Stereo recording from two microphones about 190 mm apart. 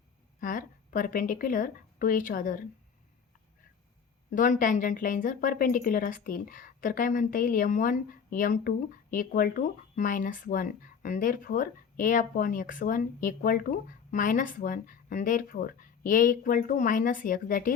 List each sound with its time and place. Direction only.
0.3 s speech: 45° left (ahead or behind)
4.3 s a woman's voice: 45° left (ahead or behind)